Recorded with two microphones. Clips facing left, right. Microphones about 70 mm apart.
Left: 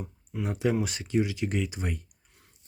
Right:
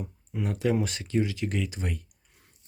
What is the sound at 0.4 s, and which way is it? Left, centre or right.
Speech, centre.